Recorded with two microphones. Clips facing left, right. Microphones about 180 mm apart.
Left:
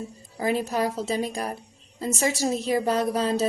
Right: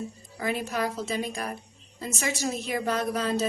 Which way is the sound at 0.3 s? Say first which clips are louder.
Left 4 dB; 35° left (ahead or behind).